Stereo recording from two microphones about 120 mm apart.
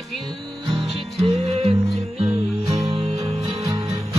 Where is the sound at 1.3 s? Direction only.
60° right (ahead or behind).